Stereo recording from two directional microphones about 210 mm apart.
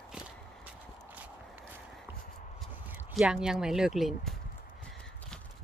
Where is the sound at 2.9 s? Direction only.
5° right (ahead or behind).